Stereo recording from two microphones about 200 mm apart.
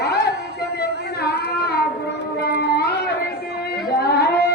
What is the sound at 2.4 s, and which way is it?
Music, 55° left (ahead or behind).